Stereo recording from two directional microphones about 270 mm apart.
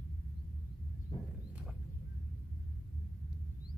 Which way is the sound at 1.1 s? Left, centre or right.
Left.